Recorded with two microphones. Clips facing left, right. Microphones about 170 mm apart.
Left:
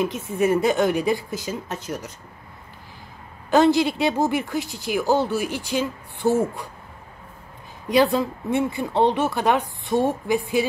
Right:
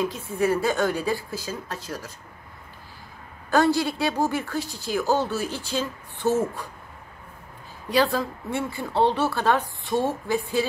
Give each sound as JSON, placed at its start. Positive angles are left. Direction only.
{"t": 0.0, "sound": "a woman's voice", "side_deg": 20}
{"t": 3.4, "sound": "a woman's voice", "side_deg": 20}
{"t": 7.9, "sound": "a woman's voice", "side_deg": 20}